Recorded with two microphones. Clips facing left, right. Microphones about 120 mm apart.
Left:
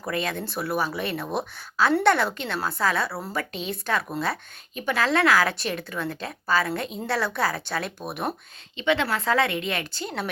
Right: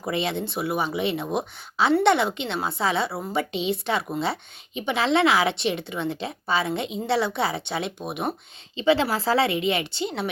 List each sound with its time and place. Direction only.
0.0 s a woman's voice: 25° right (ahead or behind)
8.7 s a woman's voice: 30° right (ahead or behind)